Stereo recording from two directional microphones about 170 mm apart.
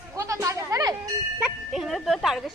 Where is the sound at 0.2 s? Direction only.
15° right (ahead or behind).